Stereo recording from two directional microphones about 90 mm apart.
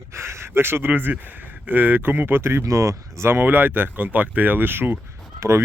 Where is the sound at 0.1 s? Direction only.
30° right (ahead or behind).